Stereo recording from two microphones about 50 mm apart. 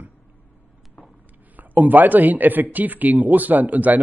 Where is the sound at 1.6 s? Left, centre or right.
Right.